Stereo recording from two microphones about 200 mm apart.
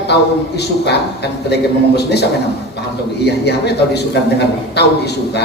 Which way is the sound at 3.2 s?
55° left (ahead or behind).